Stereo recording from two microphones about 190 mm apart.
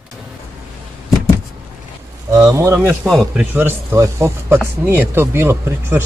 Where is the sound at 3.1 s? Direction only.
Centre (ahead or behind).